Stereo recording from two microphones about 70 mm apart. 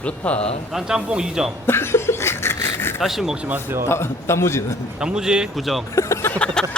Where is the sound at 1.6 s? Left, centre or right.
Left.